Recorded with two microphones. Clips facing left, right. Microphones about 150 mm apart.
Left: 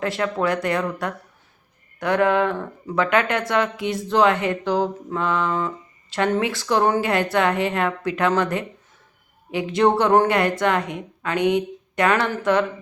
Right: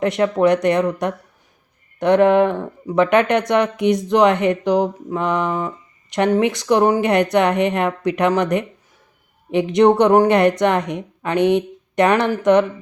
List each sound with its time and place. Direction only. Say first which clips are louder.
0.0 s speech: right 7 dB; 20° right (ahead or behind)